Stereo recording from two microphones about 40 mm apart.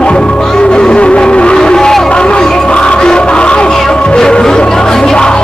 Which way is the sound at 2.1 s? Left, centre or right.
Left.